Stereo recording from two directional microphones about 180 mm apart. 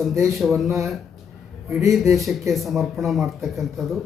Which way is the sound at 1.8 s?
15° right (ahead or behind).